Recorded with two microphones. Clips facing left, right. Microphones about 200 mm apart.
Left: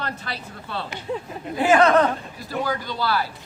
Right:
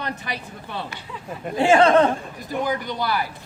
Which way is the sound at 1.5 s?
30° right (ahead or behind).